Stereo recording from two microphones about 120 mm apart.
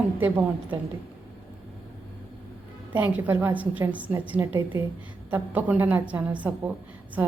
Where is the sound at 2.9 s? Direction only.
15° right (ahead or behind).